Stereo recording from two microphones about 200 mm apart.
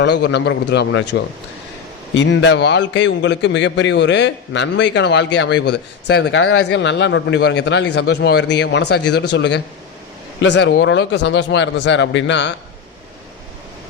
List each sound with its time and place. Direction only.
0.0 s a man's voice: 60° left (ahead or behind)
2.1 s a man's voice: 65° left (ahead or behind)